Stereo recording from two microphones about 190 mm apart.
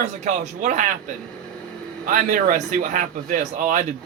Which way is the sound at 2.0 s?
45° right (ahead or behind).